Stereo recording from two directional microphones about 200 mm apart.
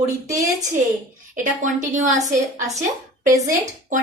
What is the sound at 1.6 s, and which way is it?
Speech, 40° right (ahead or behind).